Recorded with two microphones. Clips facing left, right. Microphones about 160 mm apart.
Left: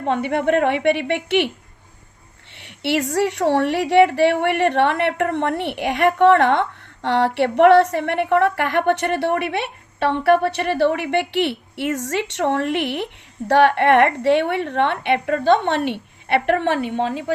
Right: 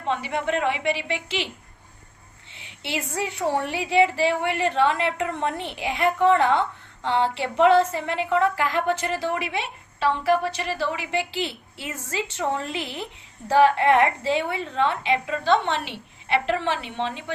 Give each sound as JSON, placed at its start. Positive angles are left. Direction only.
{"t": 0.1, "sound": "a woman's voice", "side_deg": 55}
{"t": 2.6, "sound": "a woman's voice", "side_deg": 70}